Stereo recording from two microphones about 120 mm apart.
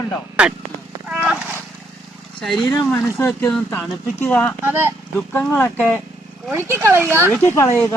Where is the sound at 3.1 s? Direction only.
20° left (ahead or behind).